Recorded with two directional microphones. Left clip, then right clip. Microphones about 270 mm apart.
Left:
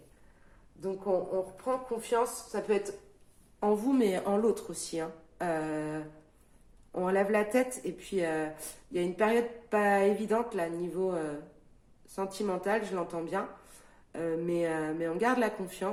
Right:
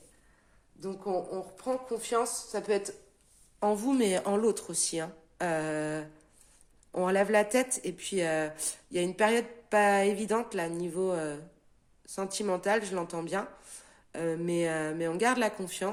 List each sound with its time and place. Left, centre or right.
0.8 s speech: right